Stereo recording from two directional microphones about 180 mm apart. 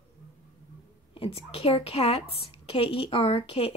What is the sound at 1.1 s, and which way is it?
A woman's voice, 30° left (ahead or behind).